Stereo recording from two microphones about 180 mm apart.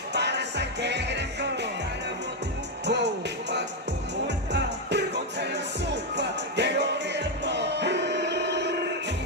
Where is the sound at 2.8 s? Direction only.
70° right (ahead or behind).